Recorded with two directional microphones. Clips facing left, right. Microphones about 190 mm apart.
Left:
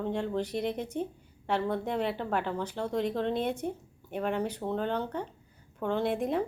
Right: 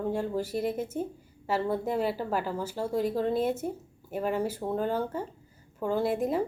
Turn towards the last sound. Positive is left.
turn(degrees=-5)  # may be behind; listen again after turning